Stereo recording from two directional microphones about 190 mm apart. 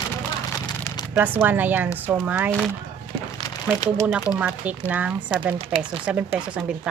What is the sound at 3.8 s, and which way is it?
Speech, 20° left (ahead or behind).